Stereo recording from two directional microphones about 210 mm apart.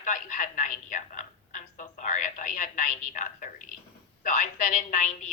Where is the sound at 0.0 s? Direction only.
40° left (ahead or behind).